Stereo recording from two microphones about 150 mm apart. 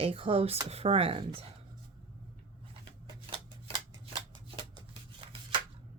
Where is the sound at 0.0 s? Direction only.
40° right (ahead or behind).